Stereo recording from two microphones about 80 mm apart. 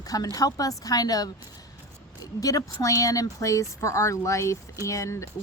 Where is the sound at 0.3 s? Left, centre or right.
Left.